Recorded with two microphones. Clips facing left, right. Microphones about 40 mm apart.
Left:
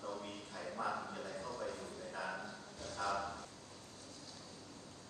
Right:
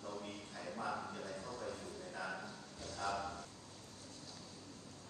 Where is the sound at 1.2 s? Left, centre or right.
Left.